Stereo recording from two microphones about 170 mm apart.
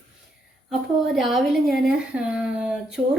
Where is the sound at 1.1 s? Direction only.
Centre (ahead or behind).